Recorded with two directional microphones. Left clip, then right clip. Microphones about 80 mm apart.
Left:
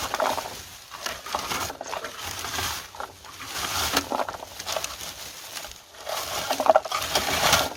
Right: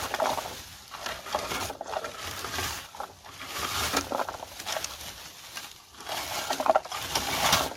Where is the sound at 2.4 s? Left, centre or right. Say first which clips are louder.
Left 4 dB; left.